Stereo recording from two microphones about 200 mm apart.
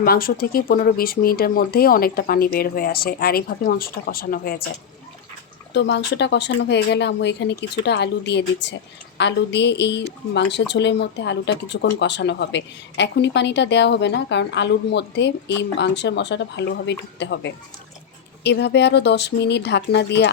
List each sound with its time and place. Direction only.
0.0 s speech: 45° left (ahead or behind)
5.7 s a woman's voice: 60° left (ahead or behind)